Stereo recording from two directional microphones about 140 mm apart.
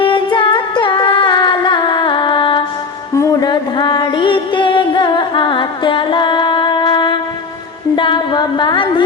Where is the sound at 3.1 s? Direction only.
20° left (ahead or behind).